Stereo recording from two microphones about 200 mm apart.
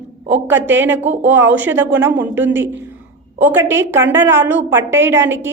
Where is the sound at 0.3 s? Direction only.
10° right (ahead or behind).